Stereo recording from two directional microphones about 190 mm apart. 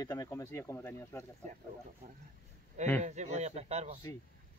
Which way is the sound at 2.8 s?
40° right (ahead or behind).